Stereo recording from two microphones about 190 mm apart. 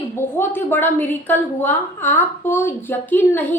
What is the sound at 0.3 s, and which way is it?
A woman's voice, 10° left (ahead or behind).